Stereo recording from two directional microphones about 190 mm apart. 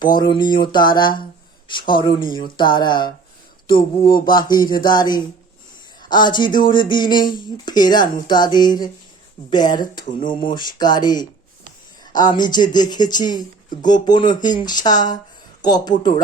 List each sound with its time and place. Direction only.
0.2 s speech: 25° left (ahead or behind)